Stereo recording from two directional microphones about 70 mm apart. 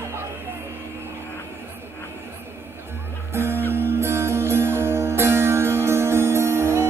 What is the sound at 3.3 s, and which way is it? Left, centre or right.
Music, right.